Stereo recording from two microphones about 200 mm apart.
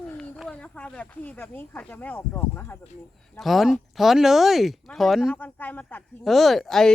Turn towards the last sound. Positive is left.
turn(degrees=0)  # may be behind; listen again after turning